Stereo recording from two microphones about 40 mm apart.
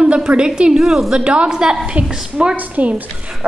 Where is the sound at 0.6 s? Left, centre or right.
Centre.